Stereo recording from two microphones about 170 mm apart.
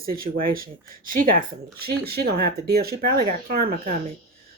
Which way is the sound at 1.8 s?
65° right (ahead or behind).